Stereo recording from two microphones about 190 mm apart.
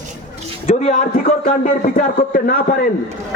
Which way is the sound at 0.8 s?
40° left (ahead or behind).